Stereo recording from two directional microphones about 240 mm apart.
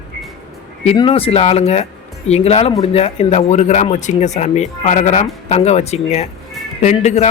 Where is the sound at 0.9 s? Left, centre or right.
Left.